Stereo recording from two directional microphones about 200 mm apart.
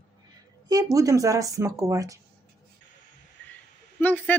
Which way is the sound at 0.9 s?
15° right (ahead or behind).